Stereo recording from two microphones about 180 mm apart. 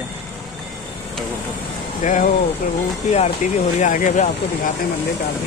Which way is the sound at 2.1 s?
45° left (ahead or behind).